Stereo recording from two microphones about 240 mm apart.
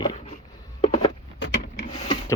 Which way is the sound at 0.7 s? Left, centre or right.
Left.